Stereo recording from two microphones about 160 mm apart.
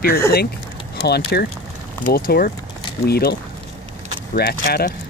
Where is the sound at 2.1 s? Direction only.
65° left (ahead or behind).